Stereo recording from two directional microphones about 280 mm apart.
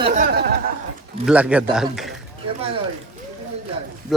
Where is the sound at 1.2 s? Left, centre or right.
Centre.